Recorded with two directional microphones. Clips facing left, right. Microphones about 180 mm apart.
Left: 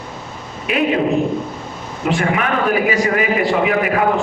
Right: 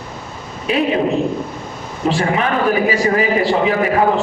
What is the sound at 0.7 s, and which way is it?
Speech, 30° right (ahead or behind).